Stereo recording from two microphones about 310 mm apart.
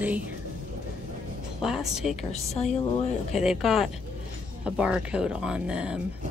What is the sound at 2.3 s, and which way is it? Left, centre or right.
Speech, left.